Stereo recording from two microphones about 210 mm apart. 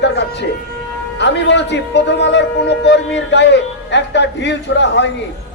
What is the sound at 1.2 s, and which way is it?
A man's voice, 55° left (ahead or behind).